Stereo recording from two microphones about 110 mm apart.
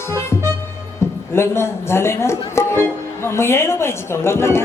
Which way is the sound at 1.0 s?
25° left (ahead or behind).